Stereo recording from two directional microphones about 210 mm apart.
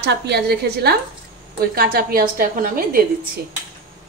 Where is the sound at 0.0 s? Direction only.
50° right (ahead or behind).